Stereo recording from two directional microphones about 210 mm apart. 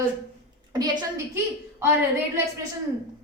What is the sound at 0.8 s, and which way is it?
Speech, 15° right (ahead or behind).